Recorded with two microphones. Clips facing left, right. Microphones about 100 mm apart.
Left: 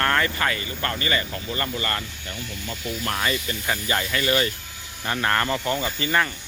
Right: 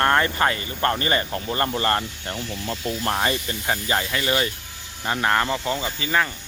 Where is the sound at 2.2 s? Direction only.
85° right.